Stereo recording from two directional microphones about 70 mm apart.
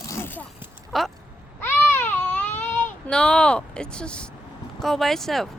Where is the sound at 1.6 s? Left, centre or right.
Left.